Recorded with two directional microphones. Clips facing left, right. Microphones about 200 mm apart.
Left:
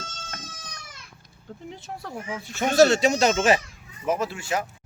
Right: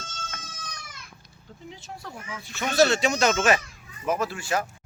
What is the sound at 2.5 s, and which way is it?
Speech, 50° left (ahead or behind).